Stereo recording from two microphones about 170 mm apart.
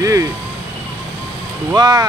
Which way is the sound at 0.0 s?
20° right (ahead or behind).